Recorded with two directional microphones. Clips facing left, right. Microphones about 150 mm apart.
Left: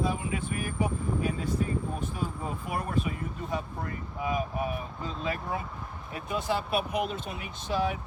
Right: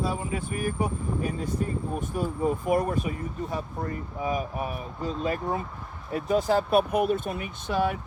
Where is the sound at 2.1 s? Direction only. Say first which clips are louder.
Right 8 dB; 50° right (ahead or behind).